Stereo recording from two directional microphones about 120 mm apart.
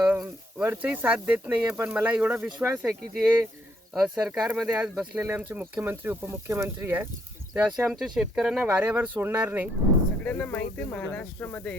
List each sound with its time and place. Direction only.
0.0 s a sound: 5° right (ahead or behind)
0.6 s speech: 15° right (ahead or behind)
7.8 s speech: centre (ahead or behind)
10.2 s speech: 15° left (ahead or behind)